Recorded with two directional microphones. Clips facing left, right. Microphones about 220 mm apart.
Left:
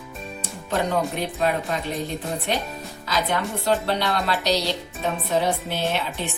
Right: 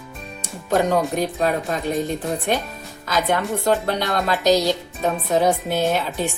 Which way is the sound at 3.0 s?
50° right (ahead or behind).